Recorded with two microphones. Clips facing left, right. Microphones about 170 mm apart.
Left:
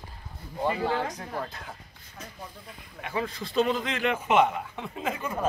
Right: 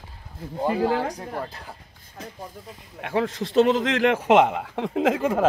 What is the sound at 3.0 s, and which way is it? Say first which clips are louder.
A man's voice: right 7 dB; 75° right (ahead or behind).